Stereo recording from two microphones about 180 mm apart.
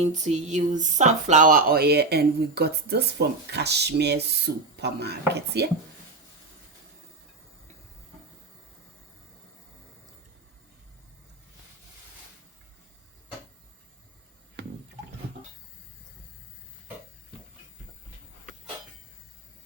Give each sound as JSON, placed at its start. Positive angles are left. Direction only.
{"t": 0.0, "sound": "speech", "side_deg": -40}